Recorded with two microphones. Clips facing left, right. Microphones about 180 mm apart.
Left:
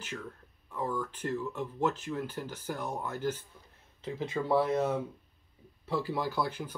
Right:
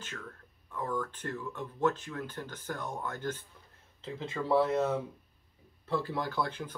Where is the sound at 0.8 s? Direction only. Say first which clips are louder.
Left 1 dB; 10° left (ahead or behind).